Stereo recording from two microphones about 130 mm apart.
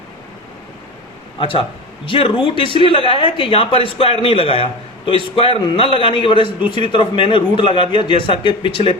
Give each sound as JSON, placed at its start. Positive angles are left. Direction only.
{"t": 1.4, "sound": "a man's voice", "side_deg": 45}